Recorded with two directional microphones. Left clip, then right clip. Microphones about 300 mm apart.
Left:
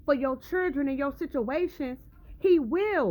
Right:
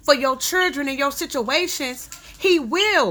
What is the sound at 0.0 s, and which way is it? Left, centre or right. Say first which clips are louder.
A woman's voice: right 9 dB; centre.